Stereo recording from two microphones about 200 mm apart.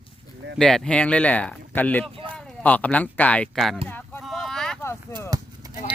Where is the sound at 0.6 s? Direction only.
5° left (ahead or behind).